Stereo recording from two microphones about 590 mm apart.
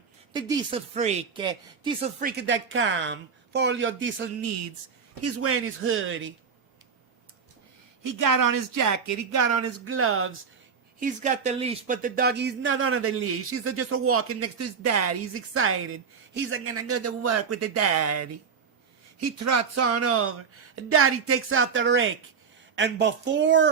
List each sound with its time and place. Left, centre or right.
0.3 s speech: centre
8.0 s speech: right